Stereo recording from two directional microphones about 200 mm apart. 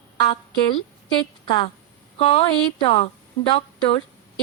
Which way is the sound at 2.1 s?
30° left (ahead or behind).